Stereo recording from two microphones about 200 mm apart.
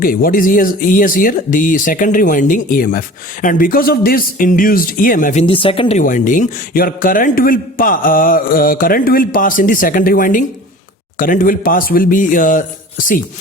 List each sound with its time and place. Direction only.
0.0 s a man's voice: 45° left (ahead or behind); by 6.0 s 25° left (ahead or behind)
6.0 s a man's voice: 40° left (ahead or behind)